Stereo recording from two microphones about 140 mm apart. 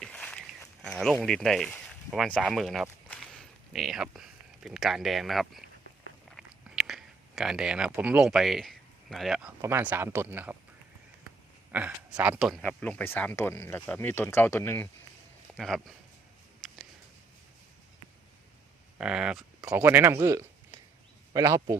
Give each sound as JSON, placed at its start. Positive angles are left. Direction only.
{"t": 0.0, "sound": "a sound", "side_deg": 10}
{"t": 0.8, "sound": "speech", "side_deg": 5}
{"t": 6.3, "sound": "chewing", "side_deg": -5}
{"t": 9.6, "sound": "speech", "side_deg": -15}
{"t": 11.7, "sound": "speech", "side_deg": -10}
{"t": 15.5, "sound": "speech", "side_deg": 0}
{"t": 18.9, "sound": "speech", "side_deg": -5}
{"t": 19.7, "sound": "speech", "side_deg": -15}
{"t": 20.1, "sound": "a sound", "side_deg": -20}
{"t": 21.3, "sound": "speech", "side_deg": -25}